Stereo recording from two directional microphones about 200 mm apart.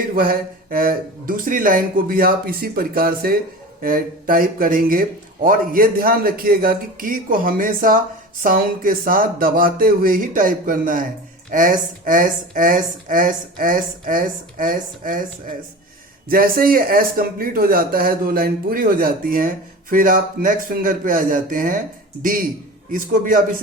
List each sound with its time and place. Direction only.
0.1 s speech: 45° right (ahead or behind)
16.3 s speech: 45° right (ahead or behind)
22.9 s speech: 40° right (ahead or behind)